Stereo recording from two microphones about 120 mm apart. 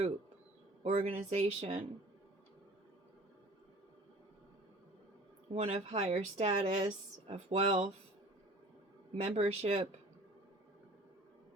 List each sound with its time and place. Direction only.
0.9 s a woman's voice: 55° right (ahead or behind)
5.5 s a woman's voice: 60° right (ahead or behind)
9.2 s a woman's voice: 60° right (ahead or behind)